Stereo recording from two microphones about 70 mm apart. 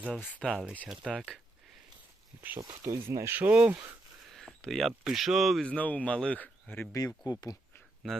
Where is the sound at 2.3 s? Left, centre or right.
Right.